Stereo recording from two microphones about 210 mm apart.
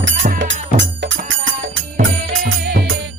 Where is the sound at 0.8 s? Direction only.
60° right (ahead or behind).